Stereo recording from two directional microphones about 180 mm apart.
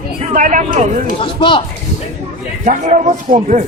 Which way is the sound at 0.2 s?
45° right (ahead or behind).